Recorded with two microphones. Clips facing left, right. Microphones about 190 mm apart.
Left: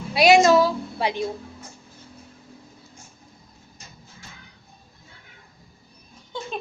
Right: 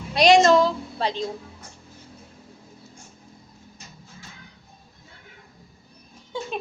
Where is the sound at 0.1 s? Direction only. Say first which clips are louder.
Even; 5° left (ahead or behind).